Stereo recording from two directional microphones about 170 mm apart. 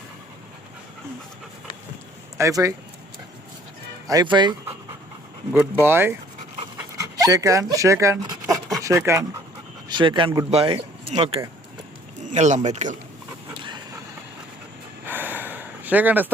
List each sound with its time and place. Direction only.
2.4 s speech: 20° right (ahead or behind)
4.0 s speech: 20° right (ahead or behind)
5.5 s speech: 10° right (ahead or behind)
7.2 s speech: 20° right (ahead or behind)
9.9 s speech: 30° right (ahead or behind); by 13.0 s 45° right (ahead or behind)
15.0 s gasp: 10° right (ahead or behind)